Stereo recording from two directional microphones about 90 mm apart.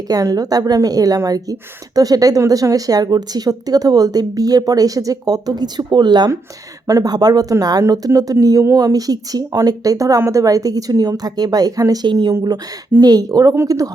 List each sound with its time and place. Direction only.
0.1 s speech: 45° right (ahead or behind)
12.0 s speech: 55° right (ahead or behind)
13.0 s speech: 45° right (ahead or behind)